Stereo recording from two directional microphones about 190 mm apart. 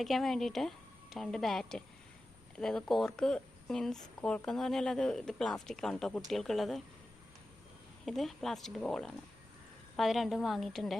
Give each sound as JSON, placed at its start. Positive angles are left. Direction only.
{"t": 0.0, "sound": "a woman's voice", "side_deg": 0}
{"t": 8.0, "sound": "a woman's voice", "side_deg": 0}